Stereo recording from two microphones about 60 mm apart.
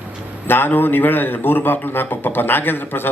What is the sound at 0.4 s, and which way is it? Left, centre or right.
A man's voice, left.